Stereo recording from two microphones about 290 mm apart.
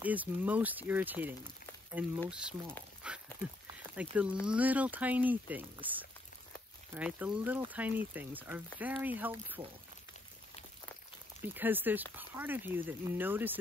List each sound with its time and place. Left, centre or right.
0.0 s speech: centre
11.4 s speech: centre